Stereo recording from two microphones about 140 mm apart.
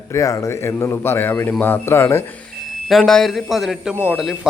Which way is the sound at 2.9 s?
5° left (ahead or behind).